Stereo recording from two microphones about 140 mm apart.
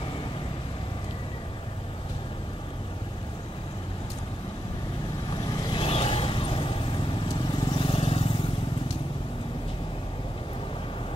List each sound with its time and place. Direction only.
5.3 s vehicle: 35° left (ahead or behind)